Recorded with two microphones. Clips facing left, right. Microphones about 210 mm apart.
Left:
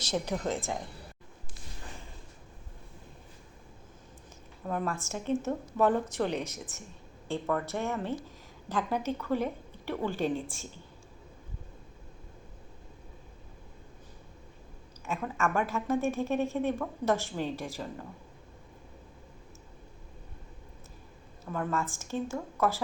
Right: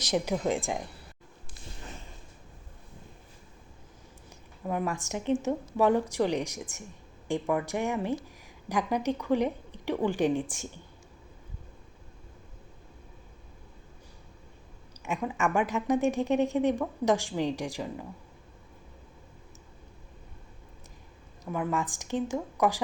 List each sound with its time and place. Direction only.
0.0 s a woman's voice: 10° right (ahead or behind)
4.6 s a woman's voice: 10° right (ahead or behind)
15.0 s a woman's voice: 15° right (ahead or behind)
21.5 s a woman's voice: 15° right (ahead or behind)